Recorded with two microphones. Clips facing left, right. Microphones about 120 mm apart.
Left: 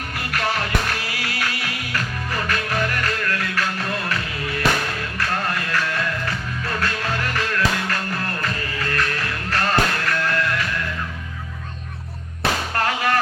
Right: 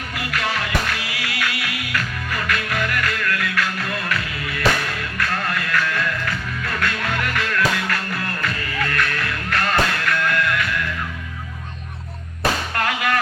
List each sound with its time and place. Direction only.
0.2 s music: 45° left (ahead or behind)
12.7 s music: 30° left (ahead or behind)